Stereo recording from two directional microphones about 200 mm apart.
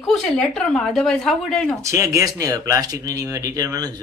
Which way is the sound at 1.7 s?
15° right (ahead or behind).